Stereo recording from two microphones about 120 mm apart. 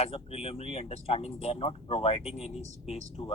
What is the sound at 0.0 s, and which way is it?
A man's voice, 55° left (ahead or behind).